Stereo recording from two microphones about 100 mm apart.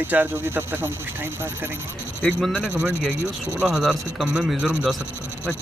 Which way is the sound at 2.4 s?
5° right (ahead or behind).